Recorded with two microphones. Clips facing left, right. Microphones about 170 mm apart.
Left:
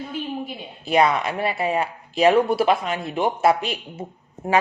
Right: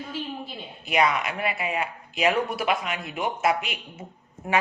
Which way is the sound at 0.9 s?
35° left (ahead or behind).